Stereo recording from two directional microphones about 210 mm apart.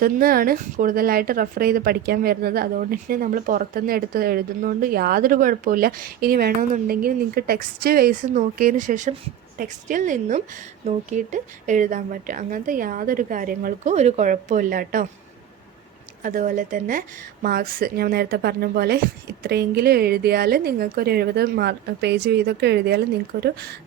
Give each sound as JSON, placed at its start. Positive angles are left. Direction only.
{"t": 0.0, "sound": "a woman's voice", "side_deg": -45}
{"t": 16.2, "sound": "a woman's voice", "side_deg": -40}